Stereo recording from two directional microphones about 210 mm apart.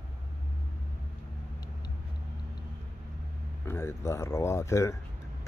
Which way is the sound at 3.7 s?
10° left (ahead or behind).